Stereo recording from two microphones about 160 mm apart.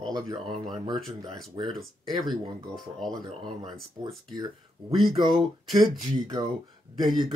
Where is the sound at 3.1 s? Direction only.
25° right (ahead or behind).